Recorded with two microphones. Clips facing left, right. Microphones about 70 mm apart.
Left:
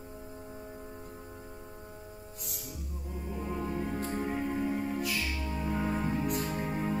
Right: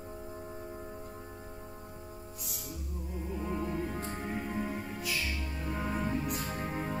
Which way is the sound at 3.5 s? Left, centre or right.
Centre.